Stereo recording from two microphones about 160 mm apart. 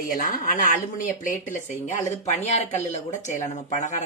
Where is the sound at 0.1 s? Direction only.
60° left (ahead or behind).